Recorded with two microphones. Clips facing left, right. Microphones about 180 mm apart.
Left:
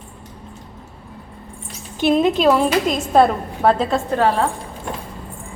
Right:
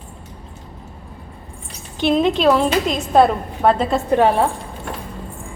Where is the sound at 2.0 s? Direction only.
5° left (ahead or behind).